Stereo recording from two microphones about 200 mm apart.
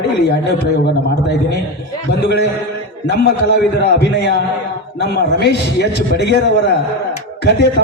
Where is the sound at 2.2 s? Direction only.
55° left (ahead or behind).